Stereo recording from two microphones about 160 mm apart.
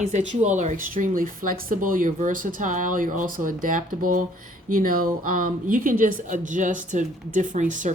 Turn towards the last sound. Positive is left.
turn(degrees=-50)  # may be behind; listen again after turning